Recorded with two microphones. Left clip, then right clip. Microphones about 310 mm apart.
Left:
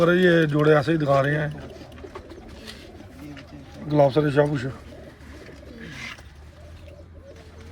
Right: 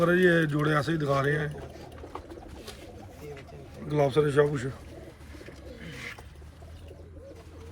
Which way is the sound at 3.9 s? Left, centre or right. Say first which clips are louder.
Left 6 dB; left.